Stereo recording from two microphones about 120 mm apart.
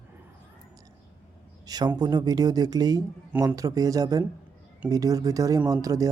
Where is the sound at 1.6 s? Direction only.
30° right (ahead or behind).